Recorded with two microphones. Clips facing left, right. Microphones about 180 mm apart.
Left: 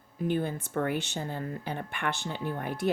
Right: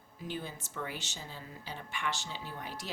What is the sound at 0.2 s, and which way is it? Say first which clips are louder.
A woman's voice: left 11 dB; 55° left (ahead or behind).